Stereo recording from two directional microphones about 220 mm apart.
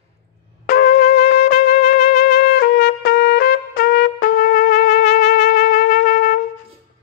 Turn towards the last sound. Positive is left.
turn(degrees=40)  # may be behind; listen again after turning